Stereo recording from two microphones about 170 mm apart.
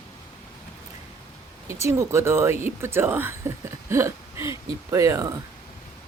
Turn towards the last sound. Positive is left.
turn(degrees=-20)  # may be behind; listen again after turning